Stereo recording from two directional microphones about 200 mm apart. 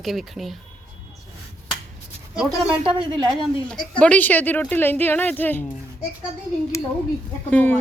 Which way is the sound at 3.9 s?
5° left (ahead or behind).